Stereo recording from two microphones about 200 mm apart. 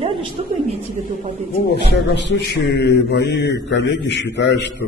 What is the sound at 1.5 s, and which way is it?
A man's voice, 60° left (ahead or behind).